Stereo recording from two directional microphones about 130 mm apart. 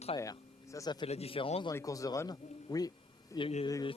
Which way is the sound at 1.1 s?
50° left (ahead or behind).